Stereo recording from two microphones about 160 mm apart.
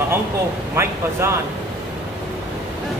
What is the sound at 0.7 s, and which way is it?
Speech, 15° right (ahead or behind).